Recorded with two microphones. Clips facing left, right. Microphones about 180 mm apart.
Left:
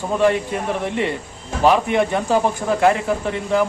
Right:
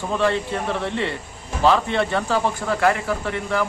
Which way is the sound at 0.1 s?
15° left (ahead or behind).